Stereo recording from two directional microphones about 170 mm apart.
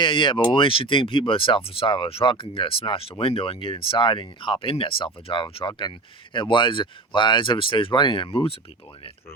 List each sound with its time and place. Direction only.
0.0 s speech: 30° left (ahead or behind)